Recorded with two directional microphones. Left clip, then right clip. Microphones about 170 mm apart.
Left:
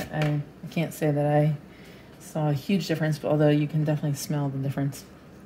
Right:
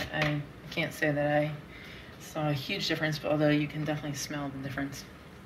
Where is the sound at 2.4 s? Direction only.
70° left (ahead or behind).